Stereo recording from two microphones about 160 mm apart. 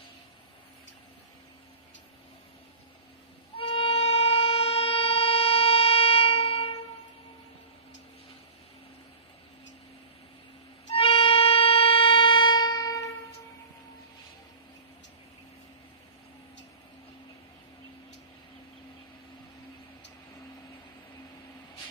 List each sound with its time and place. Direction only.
3.5 s music: 35° left (ahead or behind)
10.9 s music: 35° left (ahead or behind)